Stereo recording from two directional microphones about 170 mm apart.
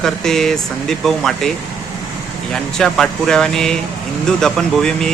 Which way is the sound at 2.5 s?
5° left (ahead or behind).